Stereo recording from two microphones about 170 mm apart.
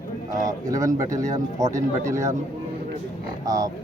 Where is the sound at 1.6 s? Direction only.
45° right (ahead or behind).